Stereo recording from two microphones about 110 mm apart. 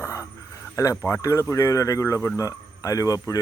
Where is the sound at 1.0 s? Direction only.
25° left (ahead or behind).